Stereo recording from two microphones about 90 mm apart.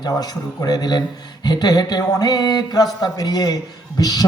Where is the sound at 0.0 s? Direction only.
50° left (ahead or behind).